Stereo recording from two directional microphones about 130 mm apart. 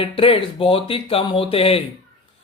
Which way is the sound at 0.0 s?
45° left (ahead or behind).